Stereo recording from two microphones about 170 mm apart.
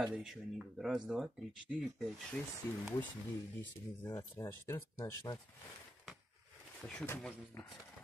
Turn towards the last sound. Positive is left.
turn(degrees=5)  # may be behind; listen again after turning